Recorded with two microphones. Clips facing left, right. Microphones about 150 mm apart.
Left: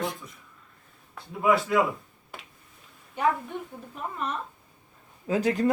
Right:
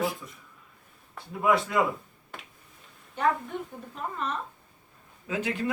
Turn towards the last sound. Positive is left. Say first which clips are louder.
# left 6 dB
turn(degrees=40)  # may be behind; listen again after turning